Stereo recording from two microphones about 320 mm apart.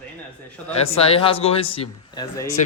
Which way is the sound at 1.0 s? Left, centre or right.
Centre.